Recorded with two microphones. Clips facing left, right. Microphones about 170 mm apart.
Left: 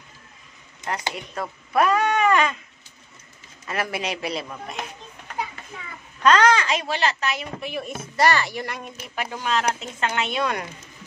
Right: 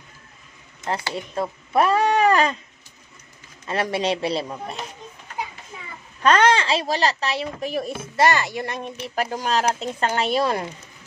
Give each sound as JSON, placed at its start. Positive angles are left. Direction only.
{"t": 1.1, "sound": "speech", "side_deg": -25}
{"t": 3.6, "sound": "speech", "side_deg": -30}
{"t": 6.2, "sound": "speech", "side_deg": -30}
{"t": 8.2, "sound": "speech", "side_deg": -20}
{"t": 9.0, "sound": "speech", "side_deg": -40}